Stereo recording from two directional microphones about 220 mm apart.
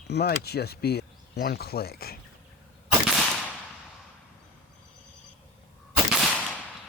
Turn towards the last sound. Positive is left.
turn(degrees=0)  # may be behind; listen again after turning